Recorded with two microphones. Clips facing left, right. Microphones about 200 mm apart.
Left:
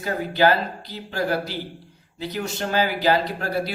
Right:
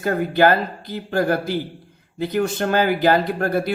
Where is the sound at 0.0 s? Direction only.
50° right (ahead or behind).